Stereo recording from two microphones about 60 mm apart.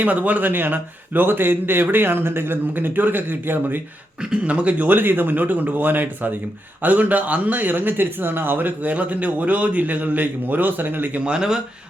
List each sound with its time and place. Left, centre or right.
0.0 s a man's voice: right
4.2 s a man's voice: centre
11.3 s speech: centre